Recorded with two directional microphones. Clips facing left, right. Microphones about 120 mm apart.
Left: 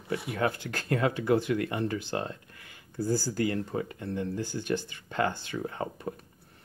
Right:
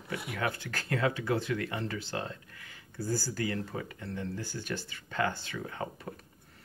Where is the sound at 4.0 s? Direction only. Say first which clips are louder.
Left 5 dB; 20° left (ahead or behind).